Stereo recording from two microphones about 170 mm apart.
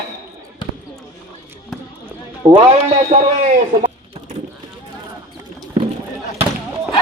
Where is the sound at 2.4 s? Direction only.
25° right (ahead or behind).